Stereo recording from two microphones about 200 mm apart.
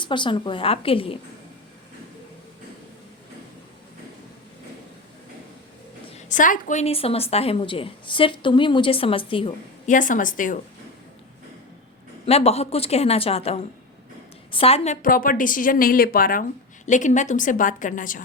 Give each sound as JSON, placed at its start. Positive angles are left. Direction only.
{"t": 0.0, "sound": "a woman's voice", "side_deg": 25}
{"t": 6.1, "sound": "a woman's voice", "side_deg": 40}
{"t": 9.9, "sound": "speech", "side_deg": 40}
{"t": 12.2, "sound": "a woman's voice", "side_deg": 30}
{"t": 15.0, "sound": "speech", "side_deg": 45}